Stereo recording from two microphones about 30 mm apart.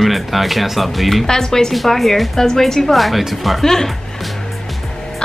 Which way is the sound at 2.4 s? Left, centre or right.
Centre.